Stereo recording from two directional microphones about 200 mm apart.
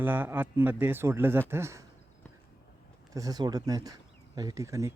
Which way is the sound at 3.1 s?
20° right (ahead or behind).